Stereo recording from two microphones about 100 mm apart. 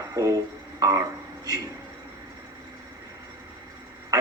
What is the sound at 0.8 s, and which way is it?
Speech, 35° right (ahead or behind).